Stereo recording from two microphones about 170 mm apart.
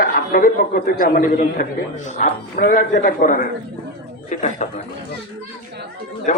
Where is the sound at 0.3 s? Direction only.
55° left (ahead or behind).